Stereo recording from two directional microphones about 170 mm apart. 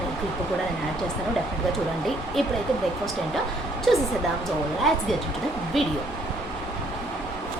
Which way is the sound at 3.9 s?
Centre (ahead or behind).